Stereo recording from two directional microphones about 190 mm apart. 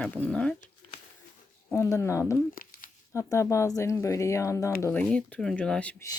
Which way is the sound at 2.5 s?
50° left (ahead or behind).